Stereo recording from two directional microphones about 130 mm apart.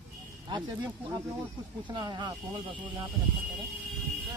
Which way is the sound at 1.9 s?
35° right (ahead or behind).